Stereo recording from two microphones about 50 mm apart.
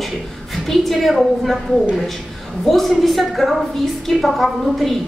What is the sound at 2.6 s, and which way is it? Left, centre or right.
A woman's voice, centre.